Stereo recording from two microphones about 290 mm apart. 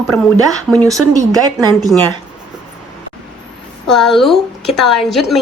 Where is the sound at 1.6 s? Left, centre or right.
Centre.